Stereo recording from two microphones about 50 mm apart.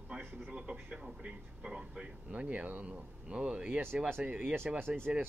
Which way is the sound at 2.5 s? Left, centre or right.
Right.